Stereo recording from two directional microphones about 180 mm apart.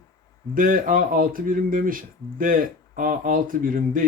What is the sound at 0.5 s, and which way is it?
Speech, 50° right (ahead or behind).